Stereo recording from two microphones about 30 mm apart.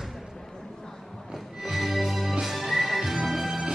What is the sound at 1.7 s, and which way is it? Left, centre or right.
Music, centre.